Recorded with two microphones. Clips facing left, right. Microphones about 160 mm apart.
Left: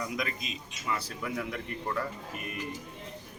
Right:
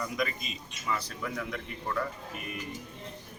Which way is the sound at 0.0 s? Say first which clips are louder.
Right 2 dB; centre (ahead or behind).